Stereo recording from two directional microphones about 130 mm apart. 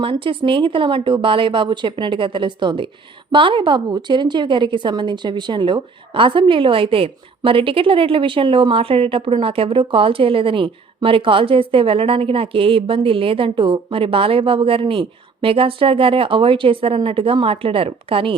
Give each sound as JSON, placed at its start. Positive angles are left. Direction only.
{"t": 0.0, "sound": "a woman's voice", "side_deg": -40}